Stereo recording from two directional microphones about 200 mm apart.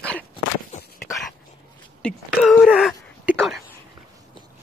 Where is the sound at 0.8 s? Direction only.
50° left (ahead or behind).